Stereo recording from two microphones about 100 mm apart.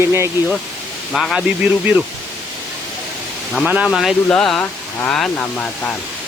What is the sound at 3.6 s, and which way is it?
Speech, 5° right (ahead or behind).